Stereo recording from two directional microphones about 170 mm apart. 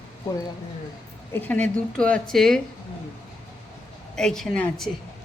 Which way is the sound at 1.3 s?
10° left (ahead or behind).